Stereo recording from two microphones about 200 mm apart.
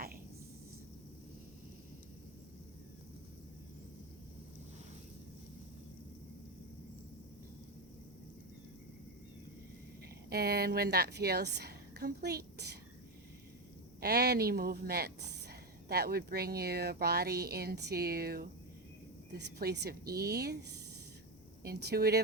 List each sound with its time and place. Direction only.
10.2 s a woman's voice: 50° right (ahead or behind)
14.0 s speech: 50° right (ahead or behind)
21.6 s speech: 55° right (ahead or behind)